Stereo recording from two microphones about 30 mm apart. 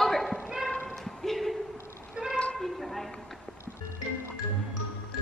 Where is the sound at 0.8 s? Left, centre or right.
Centre.